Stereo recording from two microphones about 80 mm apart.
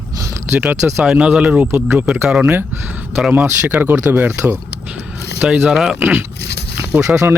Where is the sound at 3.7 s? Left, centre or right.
Right.